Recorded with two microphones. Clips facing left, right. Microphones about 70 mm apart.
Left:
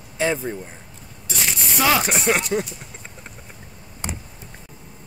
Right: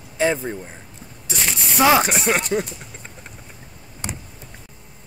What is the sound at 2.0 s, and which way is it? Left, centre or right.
Speech, centre.